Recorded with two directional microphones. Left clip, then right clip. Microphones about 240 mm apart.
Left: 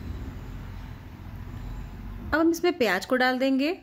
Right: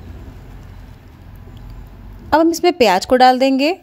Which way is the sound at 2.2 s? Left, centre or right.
Right.